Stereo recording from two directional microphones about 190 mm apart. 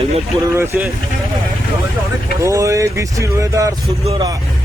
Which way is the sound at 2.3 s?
15° right (ahead or behind).